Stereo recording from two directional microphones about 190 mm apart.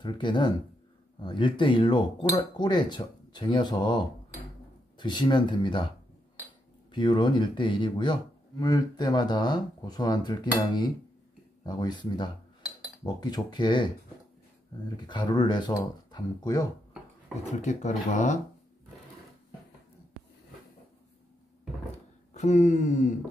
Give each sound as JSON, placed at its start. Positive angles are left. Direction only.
{"t": 0.0, "sound": "speech", "side_deg": 25}
{"t": 6.9, "sound": "speech", "side_deg": 25}
{"t": 11.6, "sound": "speech", "side_deg": 20}
{"t": 15.0, "sound": "speech", "side_deg": 25}
{"t": 17.5, "sound": "speech", "side_deg": 35}
{"t": 22.3, "sound": "speech", "side_deg": 40}